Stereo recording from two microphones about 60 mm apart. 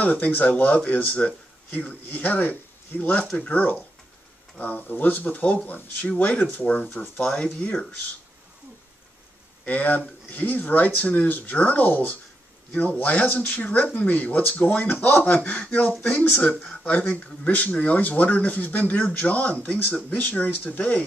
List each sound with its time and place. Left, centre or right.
0.0 s speech: left
7.2 s speech: centre
9.7 s speech: left